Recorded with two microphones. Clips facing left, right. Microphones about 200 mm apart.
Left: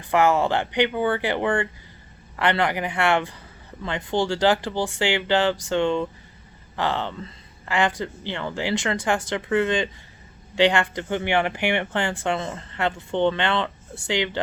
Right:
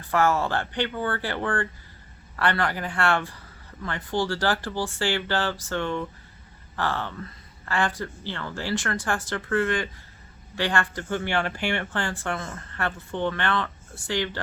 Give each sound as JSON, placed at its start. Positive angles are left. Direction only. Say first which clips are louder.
{"t": 0.0, "sound": "speech", "louder": "left 3 dB", "side_deg": 20}